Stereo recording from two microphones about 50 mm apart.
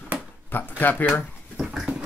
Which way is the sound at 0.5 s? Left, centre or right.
Left.